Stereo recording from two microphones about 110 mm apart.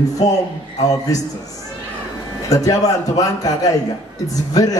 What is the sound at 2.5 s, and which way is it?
Speech, 30° left (ahead or behind).